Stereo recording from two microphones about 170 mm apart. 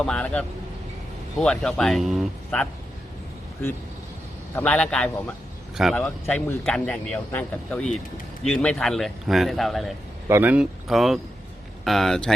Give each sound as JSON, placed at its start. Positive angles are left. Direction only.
{"t": 0.0, "sound": "a man's voice", "side_deg": 5}
{"t": 4.5, "sound": "a man's voice", "side_deg": 10}
{"t": 10.2, "sound": "a man's voice", "side_deg": -15}